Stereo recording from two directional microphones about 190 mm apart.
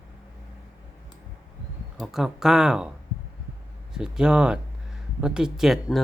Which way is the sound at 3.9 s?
5° right (ahead or behind).